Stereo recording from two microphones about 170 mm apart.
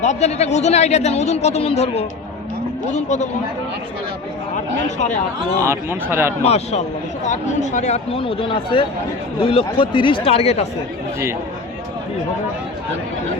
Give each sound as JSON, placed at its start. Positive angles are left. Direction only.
{"t": 0.0, "sound": "speech", "side_deg": 40}
{"t": 4.9, "sound": "speech", "side_deg": 45}
{"t": 5.6, "sound": "speech", "side_deg": -15}
{"t": 6.4, "sound": "speech", "side_deg": 40}